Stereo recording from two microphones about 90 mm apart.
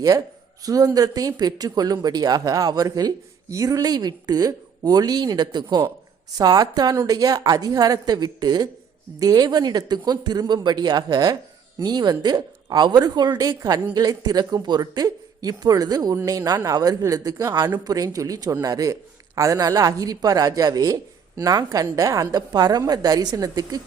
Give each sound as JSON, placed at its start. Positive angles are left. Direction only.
{"t": 0.6, "sound": "speech", "side_deg": -45}
{"t": 17.5, "sound": "speech", "side_deg": -50}
{"t": 22.4, "sound": "speech", "side_deg": -50}